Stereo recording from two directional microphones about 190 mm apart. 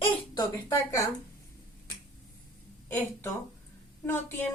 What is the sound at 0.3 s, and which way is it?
Speech, 20° left (ahead or behind).